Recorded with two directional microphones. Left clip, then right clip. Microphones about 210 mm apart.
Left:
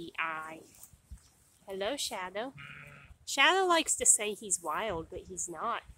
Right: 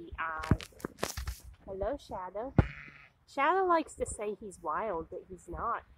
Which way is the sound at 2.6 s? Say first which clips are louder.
Right 1 dB; 55° left (ahead or behind).